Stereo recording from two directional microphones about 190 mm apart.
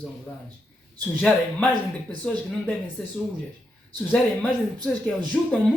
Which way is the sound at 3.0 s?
5° left (ahead or behind).